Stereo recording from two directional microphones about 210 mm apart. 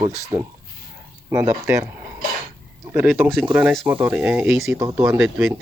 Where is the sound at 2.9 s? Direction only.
10° right (ahead or behind).